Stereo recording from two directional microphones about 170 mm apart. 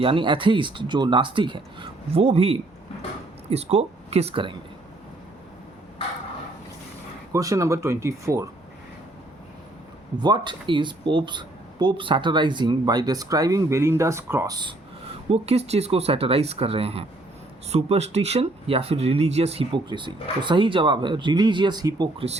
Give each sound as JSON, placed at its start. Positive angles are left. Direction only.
{"t": 0.0, "sound": "speech", "side_deg": -30}
{"t": 7.3, "sound": "speech", "side_deg": -20}
{"t": 10.2, "sound": "speech", "side_deg": -25}
{"t": 15.3, "sound": "speech", "side_deg": -40}